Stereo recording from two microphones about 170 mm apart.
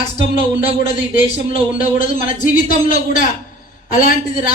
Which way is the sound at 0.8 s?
50° left (ahead or behind).